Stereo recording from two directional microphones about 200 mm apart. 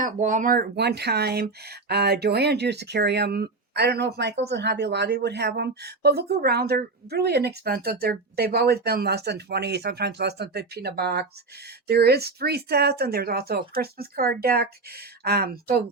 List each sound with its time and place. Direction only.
0.0 s a woman's voice: 40° right (ahead or behind)